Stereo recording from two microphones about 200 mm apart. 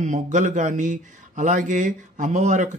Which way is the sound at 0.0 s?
40° right (ahead or behind).